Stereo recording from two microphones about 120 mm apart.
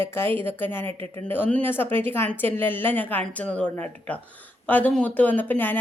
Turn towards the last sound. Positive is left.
turn(degrees=15)  # may be behind; listen again after turning